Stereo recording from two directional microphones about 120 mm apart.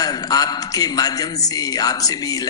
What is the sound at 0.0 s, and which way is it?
A woman's voice, 30° left (ahead or behind).